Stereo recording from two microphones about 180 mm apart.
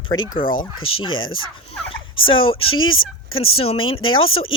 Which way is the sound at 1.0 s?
90° left.